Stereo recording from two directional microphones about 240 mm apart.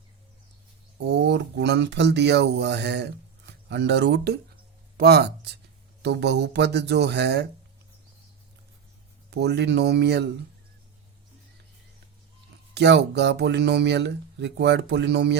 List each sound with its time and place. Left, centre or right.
1.0 s speech: right
9.3 s speech: right
12.7 s speech: right